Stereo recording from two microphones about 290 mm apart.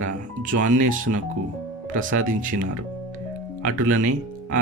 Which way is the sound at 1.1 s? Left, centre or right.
Right.